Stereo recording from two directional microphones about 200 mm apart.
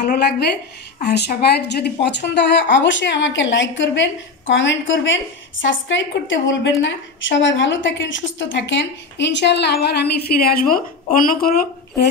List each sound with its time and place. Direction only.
0.1 s a woman's voice: 55° left (ahead or behind)